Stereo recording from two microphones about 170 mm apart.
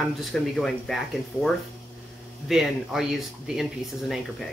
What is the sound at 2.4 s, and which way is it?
Speech, centre (ahead or behind).